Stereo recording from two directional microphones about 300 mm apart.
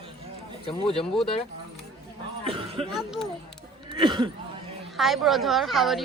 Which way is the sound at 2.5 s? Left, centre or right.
Centre.